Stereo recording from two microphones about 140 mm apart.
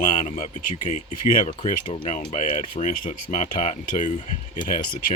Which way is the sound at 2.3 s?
60° left (ahead or behind).